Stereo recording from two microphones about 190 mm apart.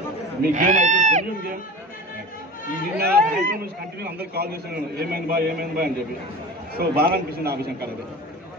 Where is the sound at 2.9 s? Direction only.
55° right (ahead or behind).